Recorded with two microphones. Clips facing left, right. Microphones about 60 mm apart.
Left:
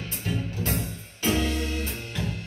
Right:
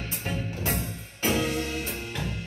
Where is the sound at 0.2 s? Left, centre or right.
Right.